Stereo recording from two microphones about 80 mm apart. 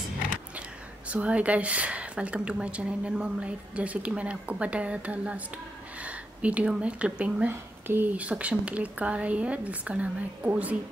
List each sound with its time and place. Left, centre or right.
0.6 s speech: centre
5.9 s a sound: centre
7.2 s speech: centre
7.8 s speech: right
8.2 s speech: centre